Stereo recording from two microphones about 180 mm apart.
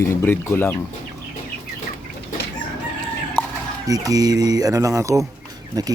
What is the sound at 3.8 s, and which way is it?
Speech, 20° right (ahead or behind).